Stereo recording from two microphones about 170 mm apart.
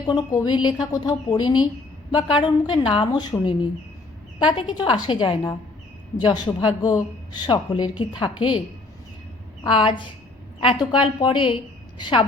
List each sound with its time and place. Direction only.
0.1 s a woman's voice: 25° left (ahead or behind)
9.6 s a woman's voice: 30° left (ahead or behind)